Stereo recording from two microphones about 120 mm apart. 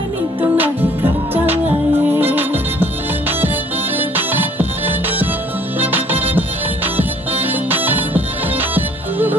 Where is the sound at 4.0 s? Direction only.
15° right (ahead or behind).